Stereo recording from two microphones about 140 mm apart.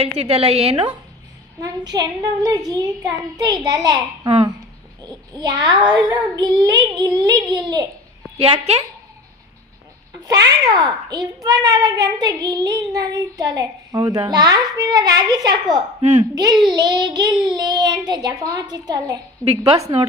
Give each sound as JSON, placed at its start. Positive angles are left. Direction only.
{"t": 0.0, "sound": "a woman's voice", "side_deg": -45}
{"t": 1.6, "sound": "a child's voice", "side_deg": -30}
{"t": 5.4, "sound": "a child's voice", "side_deg": -30}
{"t": 8.4, "sound": "a woman's voice", "side_deg": -45}
{"t": 10.2, "sound": "a child's voice", "side_deg": -25}
{"t": 16.0, "sound": "a woman's voice", "side_deg": -60}
{"t": 16.3, "sound": "a child's voice", "side_deg": -30}
{"t": 19.6, "sound": "a woman's voice", "side_deg": -45}